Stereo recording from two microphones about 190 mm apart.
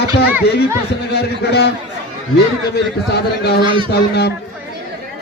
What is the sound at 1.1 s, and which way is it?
Speech, 60° left (ahead or behind).